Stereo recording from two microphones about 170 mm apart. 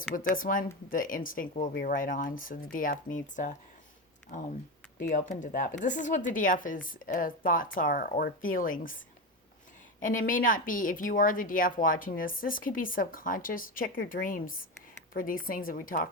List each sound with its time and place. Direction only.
0.1 s a woman's voice: 55° left (ahead or behind)
10.0 s a woman's voice: 50° left (ahead or behind)